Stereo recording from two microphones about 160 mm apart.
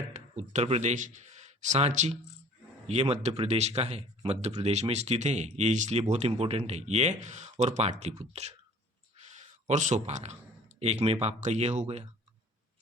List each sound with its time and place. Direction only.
0.1 s speech: 45° right (ahead or behind)